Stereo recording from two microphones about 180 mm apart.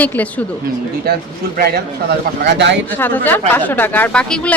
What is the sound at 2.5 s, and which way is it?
Speech, 80° right.